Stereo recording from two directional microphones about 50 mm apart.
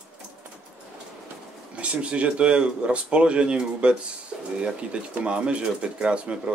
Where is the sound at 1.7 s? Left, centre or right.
Right.